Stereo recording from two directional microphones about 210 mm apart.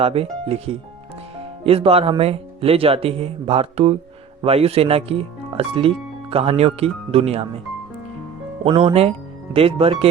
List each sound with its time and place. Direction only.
0.0 s speech: 30° right (ahead or behind)
8.6 s speech: 25° right (ahead or behind)